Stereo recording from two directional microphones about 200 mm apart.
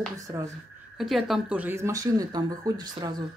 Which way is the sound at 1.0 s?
Centre (ahead or behind).